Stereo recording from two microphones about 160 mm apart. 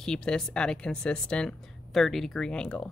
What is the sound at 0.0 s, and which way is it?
Speech, 5° left (ahead or behind).